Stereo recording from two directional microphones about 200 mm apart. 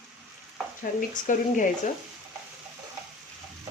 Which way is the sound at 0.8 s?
40° left (ahead or behind).